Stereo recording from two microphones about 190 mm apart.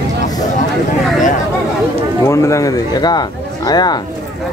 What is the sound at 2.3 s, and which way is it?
Speech, 15° left (ahead or behind).